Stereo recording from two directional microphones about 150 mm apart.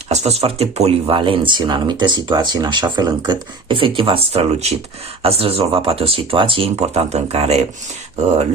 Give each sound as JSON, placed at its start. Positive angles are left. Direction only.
{"t": 0.1, "sound": "speech", "side_deg": -45}